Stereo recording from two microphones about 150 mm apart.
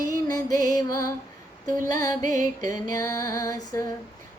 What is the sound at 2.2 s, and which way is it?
Music, 60° right (ahead or behind).